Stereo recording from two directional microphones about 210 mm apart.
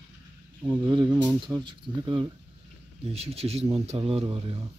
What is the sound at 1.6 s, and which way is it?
Speech, 20° right (ahead or behind).